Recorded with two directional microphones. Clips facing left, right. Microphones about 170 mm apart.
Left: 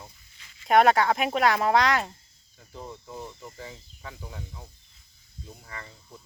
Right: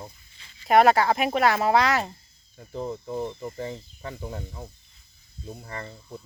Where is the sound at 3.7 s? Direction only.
45° right (ahead or behind).